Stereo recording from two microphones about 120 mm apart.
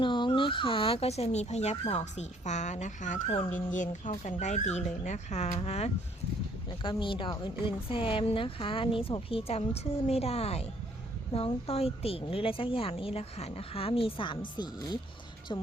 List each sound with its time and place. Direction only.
0.0 s speech: 40° left (ahead or behind); by 5.9 s 65° left (ahead or behind)
6.7 s speech: 45° left (ahead or behind)